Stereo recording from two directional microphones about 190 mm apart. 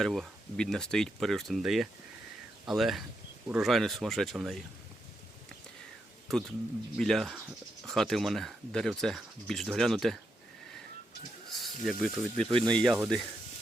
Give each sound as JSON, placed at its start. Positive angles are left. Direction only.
{"t": 0.0, "sound": "speech", "side_deg": 0}
{"t": 6.9, "sound": "speech", "side_deg": 0}
{"t": 11.5, "sound": "speech", "side_deg": 0}
{"t": 12.5, "sound": "speech", "side_deg": -25}
{"t": 12.7, "sound": "speech", "side_deg": 0}